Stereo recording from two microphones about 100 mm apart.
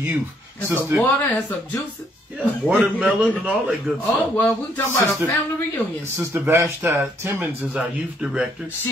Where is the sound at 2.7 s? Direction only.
15° right (ahead or behind).